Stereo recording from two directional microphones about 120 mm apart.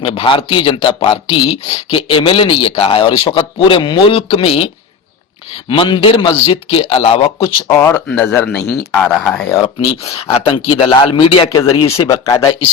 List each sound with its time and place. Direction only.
0.0 s speech: 45° left (ahead or behind)
5.6 s speech: 45° left (ahead or behind)
7.9 s speech: 10° left (ahead or behind)
8.5 s speech: 5° left (ahead or behind)
10.2 s speech: 45° left (ahead or behind)
11.5 s speech: 30° left (ahead or behind)